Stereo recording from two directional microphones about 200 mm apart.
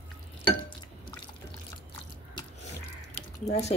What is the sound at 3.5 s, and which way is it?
Speech, 35° left (ahead or behind).